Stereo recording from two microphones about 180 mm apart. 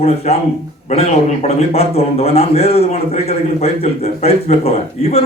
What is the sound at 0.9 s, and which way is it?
A man's voice, 40° left (ahead or behind).